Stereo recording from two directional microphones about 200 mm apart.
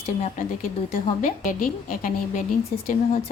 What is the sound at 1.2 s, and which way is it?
A woman's voice, 40° left (ahead or behind).